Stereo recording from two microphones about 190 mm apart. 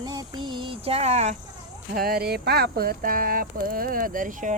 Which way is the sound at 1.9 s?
50° right (ahead or behind).